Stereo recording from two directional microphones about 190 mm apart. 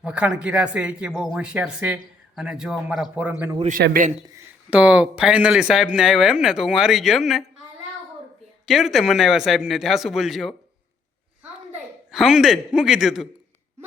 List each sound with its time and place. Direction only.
0.0 s speech: 5° right (ahead or behind)
3.7 s speech: 50° right (ahead or behind)
4.7 s speech: 5° right (ahead or behind)
8.6 s speech: centre (ahead or behind)
12.1 s speech: centre (ahead or behind)